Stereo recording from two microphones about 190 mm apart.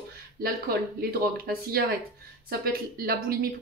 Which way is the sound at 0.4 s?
50° right (ahead or behind).